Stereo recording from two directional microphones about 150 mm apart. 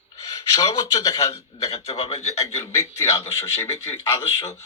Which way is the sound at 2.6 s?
20° left (ahead or behind).